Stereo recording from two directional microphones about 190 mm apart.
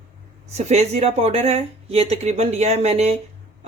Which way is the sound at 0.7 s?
35° right (ahead or behind).